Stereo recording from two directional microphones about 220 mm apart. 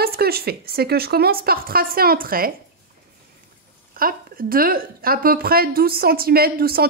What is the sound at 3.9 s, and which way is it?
A woman's voice, 40° right (ahead or behind).